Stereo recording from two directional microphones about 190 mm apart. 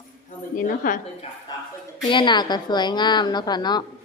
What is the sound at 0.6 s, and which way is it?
Speech, 45° left (ahead or behind).